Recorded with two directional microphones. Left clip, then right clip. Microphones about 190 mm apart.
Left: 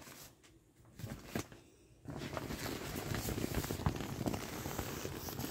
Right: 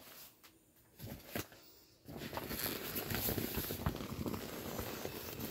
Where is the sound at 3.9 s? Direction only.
30° left (ahead or behind).